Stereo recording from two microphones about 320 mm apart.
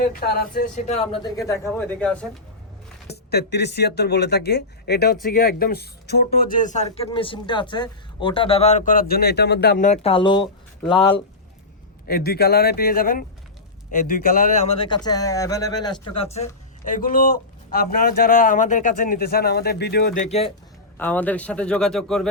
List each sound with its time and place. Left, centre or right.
0.0 s speech: left; by 2.3 s centre
3.1 s speech: left
12.0 s speech: left
21.0 s speech: centre